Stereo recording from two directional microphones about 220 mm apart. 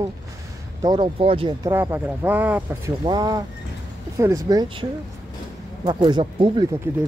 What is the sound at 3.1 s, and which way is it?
Speech, 20° right (ahead or behind).